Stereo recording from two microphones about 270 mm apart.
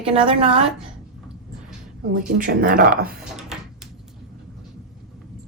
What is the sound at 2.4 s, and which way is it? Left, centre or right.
Speech, right.